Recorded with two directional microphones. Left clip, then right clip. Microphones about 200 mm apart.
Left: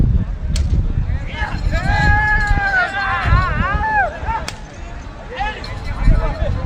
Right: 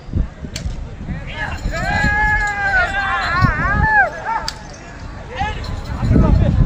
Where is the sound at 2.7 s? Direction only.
Centre (ahead or behind).